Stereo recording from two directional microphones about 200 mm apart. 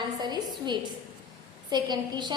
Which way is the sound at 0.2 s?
20° right (ahead or behind).